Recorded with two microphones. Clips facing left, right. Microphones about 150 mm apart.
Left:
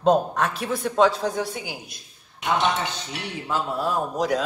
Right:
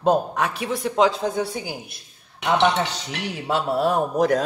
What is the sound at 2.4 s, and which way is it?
A man's voice, 75° right (ahead or behind).